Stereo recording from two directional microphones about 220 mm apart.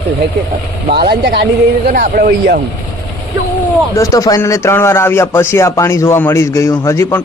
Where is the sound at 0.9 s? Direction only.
45° right (ahead or behind).